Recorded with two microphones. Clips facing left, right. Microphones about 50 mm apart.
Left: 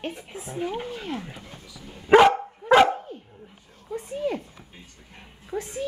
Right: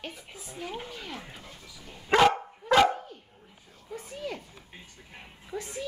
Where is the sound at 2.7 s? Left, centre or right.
Left.